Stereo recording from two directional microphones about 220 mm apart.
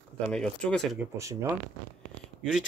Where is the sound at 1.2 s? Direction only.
15° right (ahead or behind).